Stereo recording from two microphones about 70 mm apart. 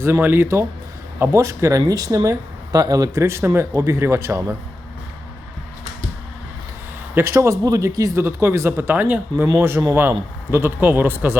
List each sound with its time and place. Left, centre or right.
0.2 s a man's voice: right
1.3 s speech: right
2.7 s speech: right
3.2 s a man's voice: right
7.3 s speech: right
8.1 s a man's voice: right
9.6 s a man's voice: right